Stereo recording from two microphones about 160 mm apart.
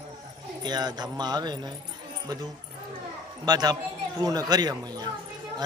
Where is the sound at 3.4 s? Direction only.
25° right (ahead or behind).